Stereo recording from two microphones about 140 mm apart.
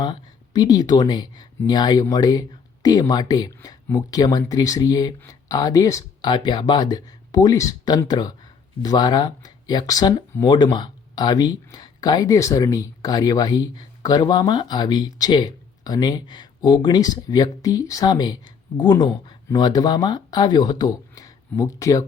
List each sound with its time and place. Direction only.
0.0 s speech: 30° left (ahead or behind)
6.3 s speech: 35° left (ahead or behind)